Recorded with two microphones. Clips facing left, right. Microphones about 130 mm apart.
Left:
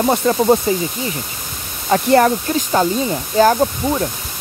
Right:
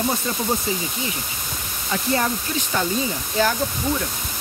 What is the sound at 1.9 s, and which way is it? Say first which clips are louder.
Speech: left 10 dB; 65° left (ahead or behind).